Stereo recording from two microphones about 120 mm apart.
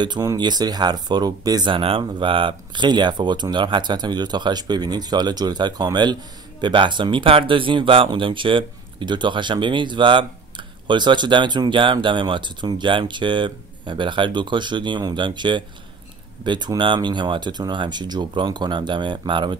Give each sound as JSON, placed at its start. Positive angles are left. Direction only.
{"t": 0.0, "sound": "speech", "side_deg": -40}
{"t": 1.7, "sound": "speech", "side_deg": -45}